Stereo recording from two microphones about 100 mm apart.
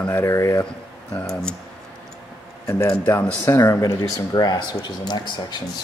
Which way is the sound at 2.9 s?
20° left (ahead or behind).